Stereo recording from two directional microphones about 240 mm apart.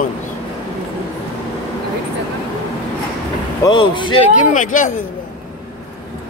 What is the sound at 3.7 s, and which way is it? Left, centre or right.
Speech, centre.